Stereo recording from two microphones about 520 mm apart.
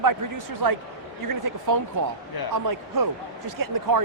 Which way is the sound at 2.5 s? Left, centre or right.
Right.